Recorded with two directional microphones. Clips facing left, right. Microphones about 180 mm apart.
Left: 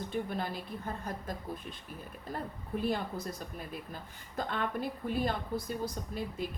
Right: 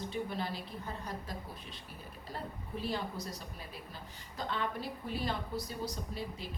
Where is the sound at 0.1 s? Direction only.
50° left (ahead or behind).